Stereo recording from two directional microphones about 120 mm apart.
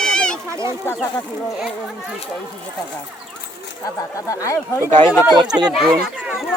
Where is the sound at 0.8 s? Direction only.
20° left (ahead or behind).